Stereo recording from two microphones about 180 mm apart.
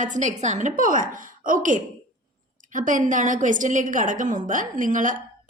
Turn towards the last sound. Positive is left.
turn(degrees=-45)  # may be behind; listen again after turning